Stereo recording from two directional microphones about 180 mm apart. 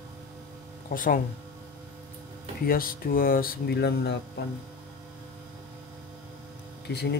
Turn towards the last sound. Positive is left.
turn(degrees=65)  # may be behind; listen again after turning